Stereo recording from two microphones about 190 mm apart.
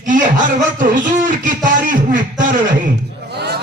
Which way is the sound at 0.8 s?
45° right (ahead or behind).